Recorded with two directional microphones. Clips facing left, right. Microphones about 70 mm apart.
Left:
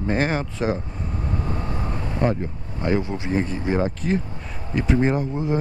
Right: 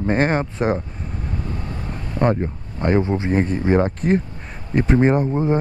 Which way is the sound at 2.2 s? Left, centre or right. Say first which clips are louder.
Right 4 dB; right.